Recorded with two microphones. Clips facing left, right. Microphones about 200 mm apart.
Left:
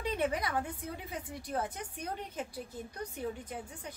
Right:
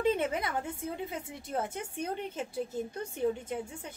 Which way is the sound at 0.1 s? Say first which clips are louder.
Right 2 dB; 25° right (ahead or behind).